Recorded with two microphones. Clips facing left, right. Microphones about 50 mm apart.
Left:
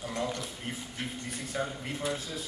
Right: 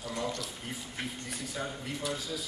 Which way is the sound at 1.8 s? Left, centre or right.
Left.